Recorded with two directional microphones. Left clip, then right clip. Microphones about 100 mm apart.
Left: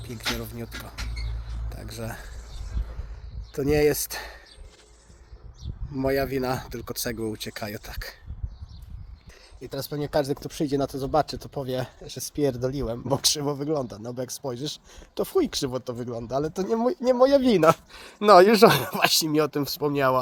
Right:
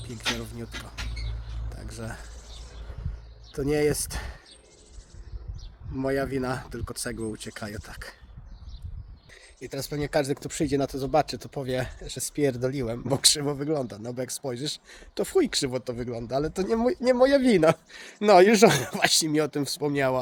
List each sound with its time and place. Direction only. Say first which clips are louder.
0.0 s speech: even; 5° left (ahead or behind)
3.5 s speech: left 3 dB; centre (ahead or behind)
5.9 s speech: left 2 dB; 5° left (ahead or behind)
9.6 s speech: even; 10° right (ahead or behind)